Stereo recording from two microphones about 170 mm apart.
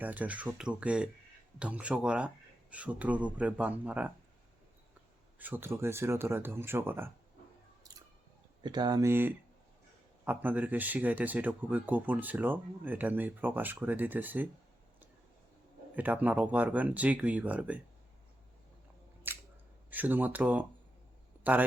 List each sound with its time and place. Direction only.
0.0 s speech: 10° right (ahead or behind)
5.4 s speech: 10° right (ahead or behind)
8.6 s speech: 25° right (ahead or behind)
16.0 s speech: 10° right (ahead or behind)
19.3 s scissors: 10° right (ahead or behind)
19.9 s speech: 10° right (ahead or behind)